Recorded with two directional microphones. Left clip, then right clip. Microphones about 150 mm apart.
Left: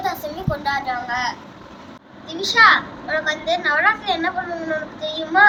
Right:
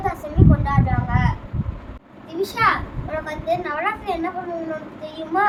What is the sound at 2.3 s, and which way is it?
A child's voice, 25° right (ahead or behind).